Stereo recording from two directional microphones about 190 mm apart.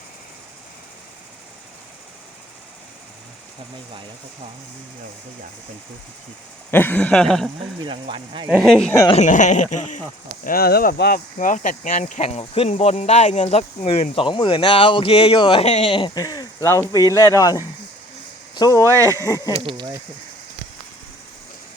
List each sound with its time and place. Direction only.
6.7 s speech: 10° left (ahead or behind)
7.8 s speech: 25° right (ahead or behind)
8.4 s speech: centre (ahead or behind)
9.1 s speech: 40° left (ahead or behind)
10.4 s speech: 50° left (ahead or behind); by 18.9 s 20° left (ahead or behind)
18.9 s speech: 15° right (ahead or behind)
19.2 s speech: 15° left (ahead or behind)
19.6 s speech: 20° right (ahead or behind)